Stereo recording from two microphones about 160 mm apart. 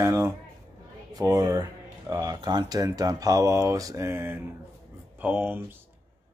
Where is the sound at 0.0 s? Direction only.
20° right (ahead or behind).